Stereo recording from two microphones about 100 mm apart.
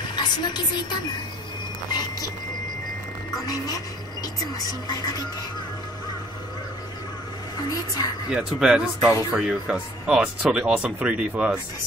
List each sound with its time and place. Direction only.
0.1 s a woman's voice: 45° left (ahead or behind)
3.4 s speech: 40° left (ahead or behind)
7.6 s speech: 40° left (ahead or behind)
8.3 s speech: 5° right (ahead or behind)